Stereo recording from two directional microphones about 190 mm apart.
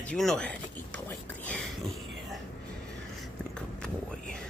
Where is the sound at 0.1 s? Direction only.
5° left (ahead or behind).